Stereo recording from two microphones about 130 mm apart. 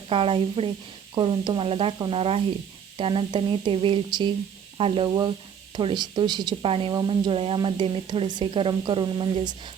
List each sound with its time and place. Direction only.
0.1 s speech: 45° right (ahead or behind)
5.0 s speech: 35° right (ahead or behind)